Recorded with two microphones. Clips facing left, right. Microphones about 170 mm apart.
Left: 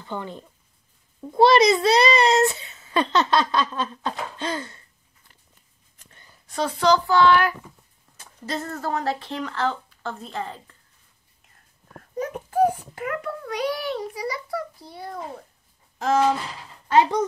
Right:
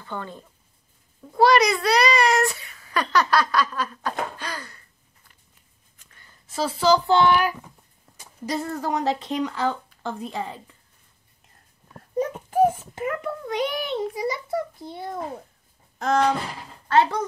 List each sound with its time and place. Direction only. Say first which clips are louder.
0.0 s a child's voice: left 2 dB; 20° left (ahead or behind)
6.4 s a woman's voice: even; 5° right (ahead or behind)
7.1 s speech: left 1 dB; 20° right (ahead or behind)
12.4 s a child's voice: even; 20° right (ahead or behind)
16.0 s a sound: left 1 dB; 5° left (ahead or behind)
16.8 s speech: left 1 dB; 15° left (ahead or behind)